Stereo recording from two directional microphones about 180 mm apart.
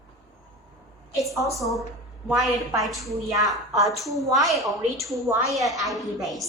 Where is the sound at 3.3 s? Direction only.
20° right (ahead or behind).